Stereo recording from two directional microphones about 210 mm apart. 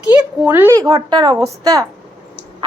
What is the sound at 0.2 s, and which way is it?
A woman's voice, 10° right (ahead or behind).